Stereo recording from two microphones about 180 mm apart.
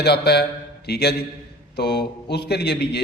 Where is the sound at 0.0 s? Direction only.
65° left (ahead or behind).